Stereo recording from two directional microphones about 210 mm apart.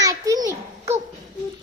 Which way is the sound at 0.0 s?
15° right (ahead or behind).